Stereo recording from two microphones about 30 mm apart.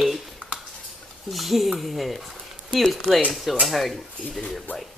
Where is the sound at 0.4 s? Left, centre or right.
Right.